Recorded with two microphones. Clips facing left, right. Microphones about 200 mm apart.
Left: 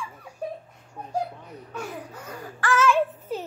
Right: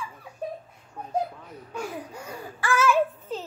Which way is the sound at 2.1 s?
10° right (ahead or behind).